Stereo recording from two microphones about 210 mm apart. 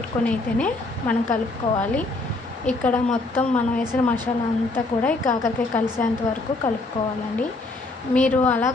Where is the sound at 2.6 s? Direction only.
5° left (ahead or behind).